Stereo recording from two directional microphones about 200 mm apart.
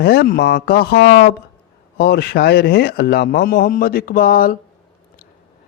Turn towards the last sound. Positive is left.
turn(degrees=45)  # may be behind; listen again after turning